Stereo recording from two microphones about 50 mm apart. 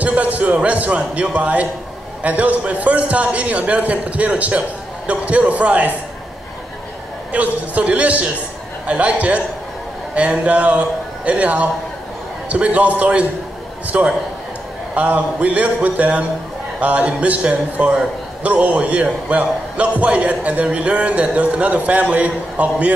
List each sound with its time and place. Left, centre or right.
0.0 s a man's voice: right
7.3 s a man's voice: right
10.1 s a man's voice: right